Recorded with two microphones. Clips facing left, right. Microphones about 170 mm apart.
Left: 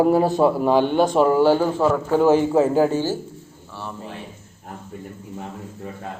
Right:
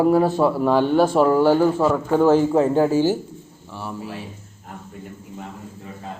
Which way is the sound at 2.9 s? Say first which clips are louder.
Right 4 dB; 15° right (ahead or behind).